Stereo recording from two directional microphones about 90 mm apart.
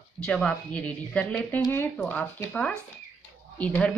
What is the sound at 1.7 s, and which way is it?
Speech, 25° left (ahead or behind).